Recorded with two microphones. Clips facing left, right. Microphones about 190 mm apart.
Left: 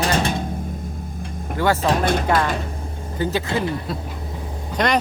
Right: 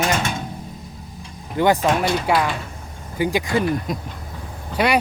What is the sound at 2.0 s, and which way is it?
Speech, 55° left (ahead or behind).